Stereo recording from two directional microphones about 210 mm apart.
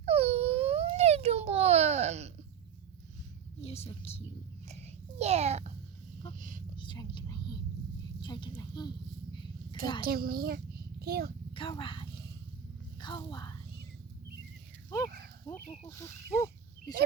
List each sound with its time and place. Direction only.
0.0 s baby cry: 30° right (ahead or behind)
3.6 s speech: 30° left (ahead or behind)
4.7 s a sound: 30° right (ahead or behind)
6.7 s whispering: 20° left (ahead or behind)
8.2 s speech: 20° left (ahead or behind)
10.0 s a child's voice: 45° right (ahead or behind)
11.5 s speech: 25° left (ahead or behind)
13.0 s a sound: 20° left (ahead or behind)
14.8 s livestock: 15° left (ahead or behind)
15.9 s speech: 15° left (ahead or behind)